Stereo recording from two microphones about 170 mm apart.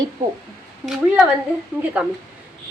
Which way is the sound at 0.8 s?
5° right (ahead or behind).